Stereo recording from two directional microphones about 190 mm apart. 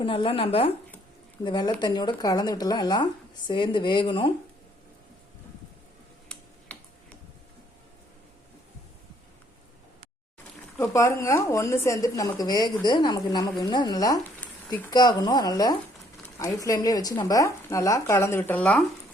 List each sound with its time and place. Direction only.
0.0 s speech: 30° left (ahead or behind)
6.3 s a sound: 5° left (ahead or behind)
6.7 s tick-tock: 5° left (ahead or behind)
10.8 s speech: 15° left (ahead or behind)
14.4 s a sound: 5° left (ahead or behind)
14.8 s speech: 20° left (ahead or behind)